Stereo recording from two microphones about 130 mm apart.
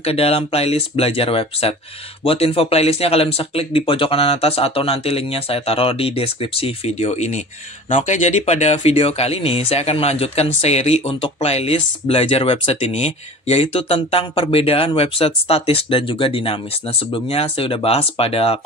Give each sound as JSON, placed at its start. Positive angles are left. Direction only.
{"t": 0.0, "sound": "speech", "side_deg": 50}